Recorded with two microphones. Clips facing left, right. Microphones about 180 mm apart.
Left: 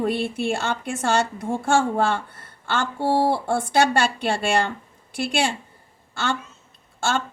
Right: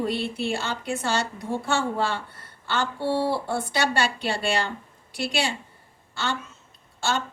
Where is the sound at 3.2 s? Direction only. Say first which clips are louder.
Left 4 dB; 50° left (ahead or behind).